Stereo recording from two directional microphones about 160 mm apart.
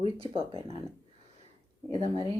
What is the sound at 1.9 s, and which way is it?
Speech, 35° left (ahead or behind).